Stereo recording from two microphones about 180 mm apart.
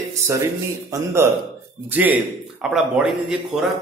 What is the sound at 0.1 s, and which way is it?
A man's voice, 15° right (ahead or behind).